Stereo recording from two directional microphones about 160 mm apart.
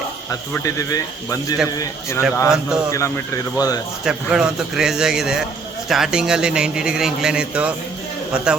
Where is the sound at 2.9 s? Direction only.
20° left (ahead or behind).